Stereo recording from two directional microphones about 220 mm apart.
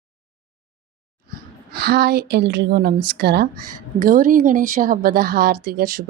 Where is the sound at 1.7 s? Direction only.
50° right (ahead or behind).